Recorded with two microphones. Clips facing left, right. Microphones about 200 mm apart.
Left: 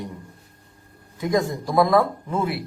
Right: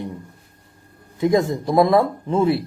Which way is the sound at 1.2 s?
25° right (ahead or behind).